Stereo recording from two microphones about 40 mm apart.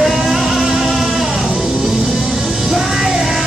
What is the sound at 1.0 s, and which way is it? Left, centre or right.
Music, centre.